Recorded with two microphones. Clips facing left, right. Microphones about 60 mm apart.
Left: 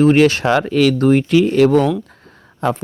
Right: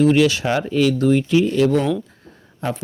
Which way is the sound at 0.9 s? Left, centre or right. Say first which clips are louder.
Left 3 dB; left.